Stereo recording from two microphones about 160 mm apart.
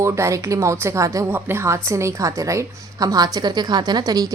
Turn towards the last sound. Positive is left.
turn(degrees=-20)  # may be behind; listen again after turning